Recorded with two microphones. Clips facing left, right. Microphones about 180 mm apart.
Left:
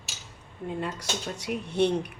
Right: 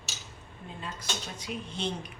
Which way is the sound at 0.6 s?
75° left (ahead or behind).